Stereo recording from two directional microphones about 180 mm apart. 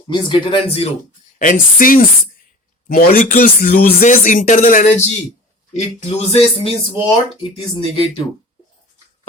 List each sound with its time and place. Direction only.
0.1 s speech: 30° left (ahead or behind)
1.4 s speech: 50° left (ahead or behind); by 8.0 s 30° left (ahead or behind)